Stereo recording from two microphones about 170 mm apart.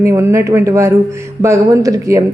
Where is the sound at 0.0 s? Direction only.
15° right (ahead or behind).